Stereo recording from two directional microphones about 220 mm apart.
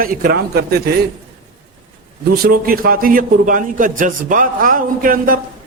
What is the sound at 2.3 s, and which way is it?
A man's voice, 45° right (ahead or behind).